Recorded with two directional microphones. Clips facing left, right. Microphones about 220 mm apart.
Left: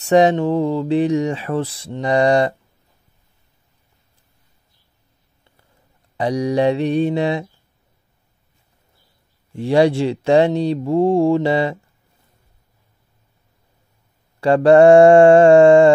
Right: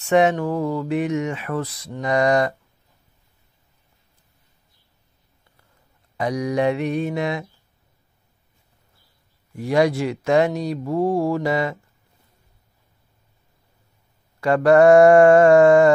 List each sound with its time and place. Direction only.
0.0 s speech: 35° left (ahead or behind)
6.1 s mantra: 30° left (ahead or behind)
9.5 s speech: 30° left (ahead or behind)
14.4 s speech: 30° left (ahead or behind)